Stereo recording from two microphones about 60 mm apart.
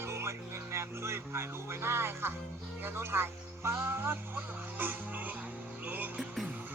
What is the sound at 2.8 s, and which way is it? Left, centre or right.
Speech, right.